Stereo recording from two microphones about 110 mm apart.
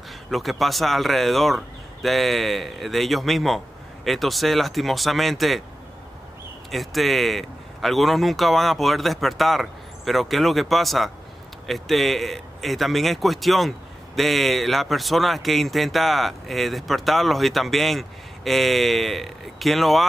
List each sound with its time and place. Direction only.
0.3 s a man's voice: centre (ahead or behind)
6.7 s a man's voice: centre (ahead or behind)